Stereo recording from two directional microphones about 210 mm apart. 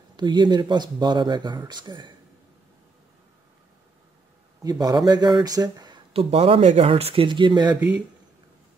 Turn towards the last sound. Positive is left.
turn(degrees=-20)  # may be behind; listen again after turning